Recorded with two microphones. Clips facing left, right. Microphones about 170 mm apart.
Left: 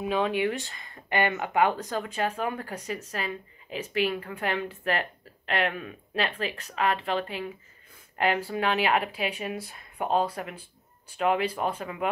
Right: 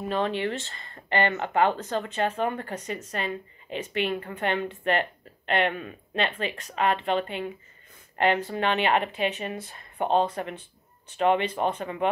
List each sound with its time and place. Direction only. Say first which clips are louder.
0.0 s speech: left 1 dB; 5° left (ahead or behind)